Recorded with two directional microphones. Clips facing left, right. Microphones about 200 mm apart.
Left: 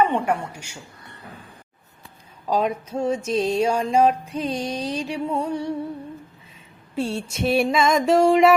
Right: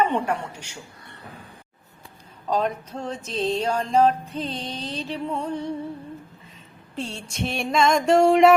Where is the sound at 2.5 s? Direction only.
10° left (ahead or behind).